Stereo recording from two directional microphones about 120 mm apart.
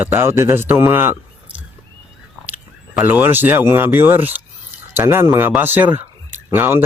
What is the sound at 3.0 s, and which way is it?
Speech, 15° right (ahead or behind).